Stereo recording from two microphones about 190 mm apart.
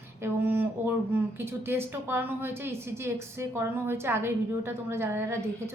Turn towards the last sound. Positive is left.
turn(degrees=-10)  # may be behind; listen again after turning